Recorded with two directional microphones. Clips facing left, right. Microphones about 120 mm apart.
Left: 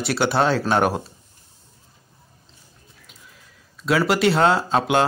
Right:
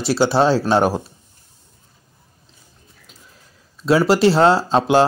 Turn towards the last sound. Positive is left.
turn(degrees=-30)  # may be behind; listen again after turning